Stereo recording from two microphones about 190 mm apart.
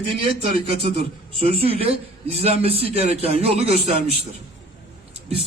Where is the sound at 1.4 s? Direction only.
30° right (ahead or behind).